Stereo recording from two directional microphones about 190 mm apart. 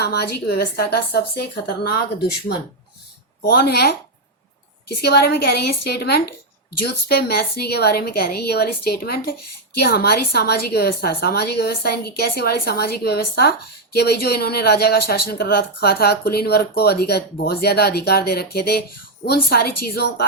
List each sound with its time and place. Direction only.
0.0 s a woman's voice: 60° left (ahead or behind)
3.4 s a woman's voice: 55° left (ahead or behind)